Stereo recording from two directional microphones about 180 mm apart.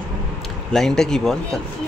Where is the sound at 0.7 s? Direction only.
5° left (ahead or behind).